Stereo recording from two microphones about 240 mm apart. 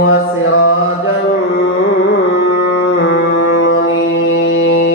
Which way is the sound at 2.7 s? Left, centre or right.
Left.